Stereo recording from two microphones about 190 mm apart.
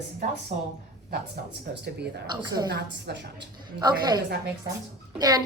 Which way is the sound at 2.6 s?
60° right (ahead or behind).